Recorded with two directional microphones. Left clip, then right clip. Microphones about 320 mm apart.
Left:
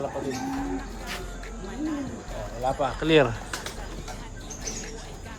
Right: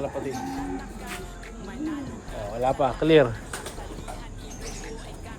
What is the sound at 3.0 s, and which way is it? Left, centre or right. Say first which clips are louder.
Speech: right 2 dB; centre.